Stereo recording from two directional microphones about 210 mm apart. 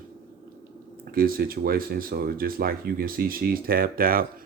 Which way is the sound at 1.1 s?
45° right (ahead or behind).